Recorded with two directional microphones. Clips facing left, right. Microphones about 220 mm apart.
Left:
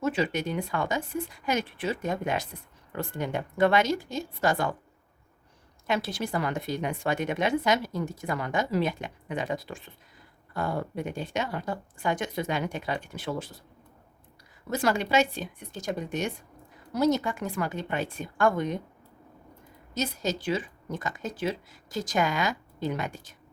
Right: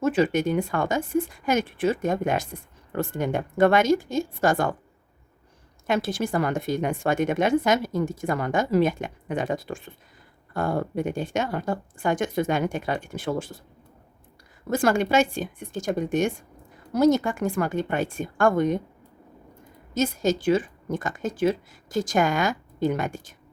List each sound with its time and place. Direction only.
0.0 s speech: 50° right (ahead or behind)
5.9 s speech: 50° right (ahead or behind)
14.7 s speech: 50° right (ahead or behind)
19.9 s speech: 50° right (ahead or behind)